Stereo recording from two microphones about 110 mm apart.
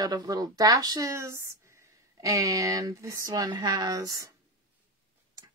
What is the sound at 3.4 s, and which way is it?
Speech, 40° right (ahead or behind).